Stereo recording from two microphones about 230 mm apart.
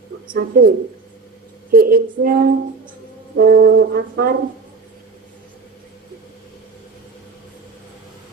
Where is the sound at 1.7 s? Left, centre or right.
Right.